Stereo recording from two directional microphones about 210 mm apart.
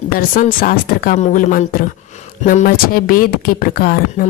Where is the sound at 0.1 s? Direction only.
45° left (ahead or behind).